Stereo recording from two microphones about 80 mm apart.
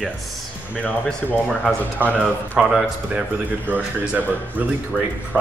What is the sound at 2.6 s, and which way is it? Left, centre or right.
Speech, centre.